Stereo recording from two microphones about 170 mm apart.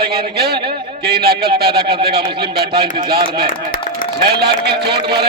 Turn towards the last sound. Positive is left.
turn(degrees=-70)  # may be behind; listen again after turning